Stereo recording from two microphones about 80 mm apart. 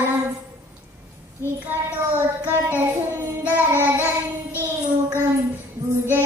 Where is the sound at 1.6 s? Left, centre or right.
Right.